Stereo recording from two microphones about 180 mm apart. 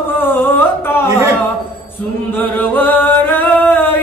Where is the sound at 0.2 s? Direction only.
10° left (ahead or behind).